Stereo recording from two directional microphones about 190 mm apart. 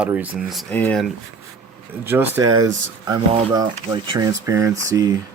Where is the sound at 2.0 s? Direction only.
10° right (ahead or behind).